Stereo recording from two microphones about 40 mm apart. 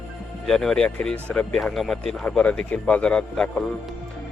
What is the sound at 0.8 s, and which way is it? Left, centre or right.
Speech, left.